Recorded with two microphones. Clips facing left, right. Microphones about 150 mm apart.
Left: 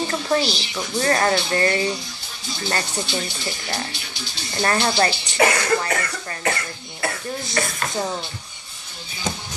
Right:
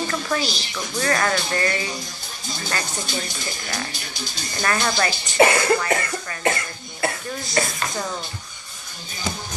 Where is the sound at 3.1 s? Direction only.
45° right (ahead or behind).